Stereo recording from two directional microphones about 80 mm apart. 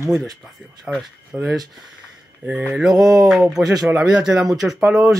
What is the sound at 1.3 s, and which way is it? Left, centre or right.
Speech, right.